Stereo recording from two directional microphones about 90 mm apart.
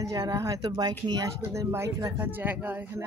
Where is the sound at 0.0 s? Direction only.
40° right (ahead or behind).